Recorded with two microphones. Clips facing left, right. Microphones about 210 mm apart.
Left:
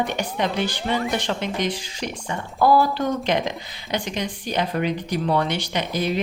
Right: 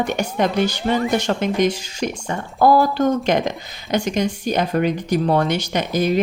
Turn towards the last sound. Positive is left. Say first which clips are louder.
# right 5 dB
turn(degrees=-45)  # may be behind; listen again after turning